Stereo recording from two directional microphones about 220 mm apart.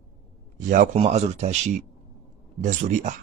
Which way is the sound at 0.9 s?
25° right (ahead or behind).